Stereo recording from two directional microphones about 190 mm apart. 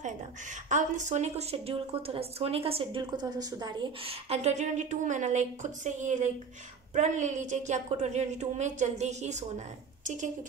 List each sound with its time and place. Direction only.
0.7 s speech: 40° right (ahead or behind)